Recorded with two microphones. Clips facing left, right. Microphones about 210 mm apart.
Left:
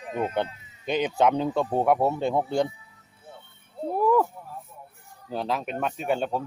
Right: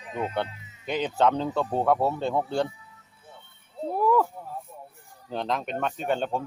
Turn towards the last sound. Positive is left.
turn(degrees=5)  # may be behind; listen again after turning